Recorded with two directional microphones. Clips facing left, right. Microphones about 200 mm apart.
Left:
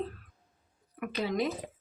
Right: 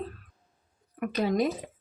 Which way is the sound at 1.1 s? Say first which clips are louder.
Right 5 dB; 45° right (ahead or behind).